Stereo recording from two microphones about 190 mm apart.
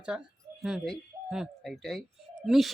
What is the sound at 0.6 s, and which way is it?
Speech, centre (ahead or behind).